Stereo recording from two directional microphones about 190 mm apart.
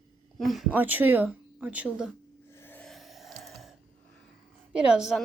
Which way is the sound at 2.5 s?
10° left (ahead or behind).